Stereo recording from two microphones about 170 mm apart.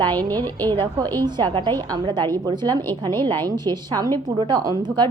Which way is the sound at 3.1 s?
15° left (ahead or behind).